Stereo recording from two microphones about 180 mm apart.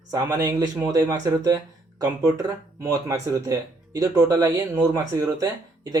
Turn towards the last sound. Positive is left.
turn(degrees=-20)  # may be behind; listen again after turning